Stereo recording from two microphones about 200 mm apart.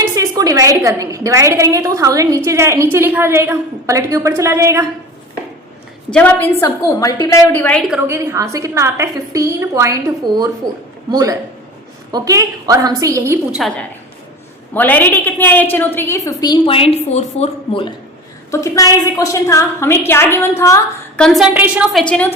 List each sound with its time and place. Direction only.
0.0 s a woman's voice: 15° right (ahead or behind)
6.1 s a woman's voice: 10° left (ahead or behind)
8.0 s a woman's voice: 15° right (ahead or behind)
13.6 s a woman's voice: 5° left (ahead or behind); by 17.9 s 30° left (ahead or behind)
18.5 s a woman's voice: 15° left (ahead or behind)
21.2 s a woman's voice: centre (ahead or behind)
22.0 s a woman's voice: 5° left (ahead or behind)